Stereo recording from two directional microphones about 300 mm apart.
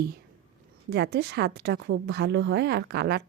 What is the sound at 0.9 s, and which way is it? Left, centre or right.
A woman's voice, right.